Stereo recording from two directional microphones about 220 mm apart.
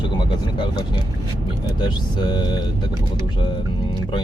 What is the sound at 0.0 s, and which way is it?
Speech, 20° left (ahead or behind).